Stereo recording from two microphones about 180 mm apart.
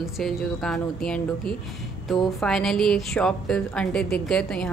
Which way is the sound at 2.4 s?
Centre (ahead or behind).